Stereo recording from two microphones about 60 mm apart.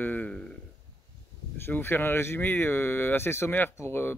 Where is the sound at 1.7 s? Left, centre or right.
Left.